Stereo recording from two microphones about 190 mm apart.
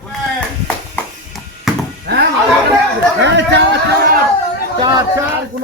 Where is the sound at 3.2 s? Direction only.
65° right (ahead or behind).